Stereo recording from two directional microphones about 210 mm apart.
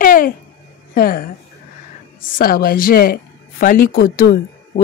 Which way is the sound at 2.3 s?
45° left (ahead or behind).